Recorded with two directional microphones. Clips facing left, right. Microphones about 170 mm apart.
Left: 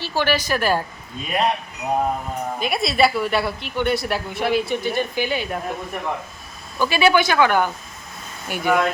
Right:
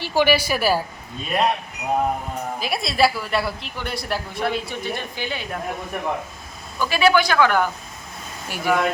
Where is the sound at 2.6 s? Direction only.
Centre (ahead or behind).